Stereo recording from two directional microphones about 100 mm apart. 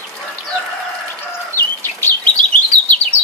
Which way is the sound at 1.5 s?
20° left (ahead or behind).